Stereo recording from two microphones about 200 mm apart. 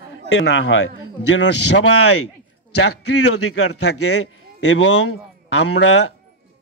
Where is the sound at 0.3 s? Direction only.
65° left (ahead or behind).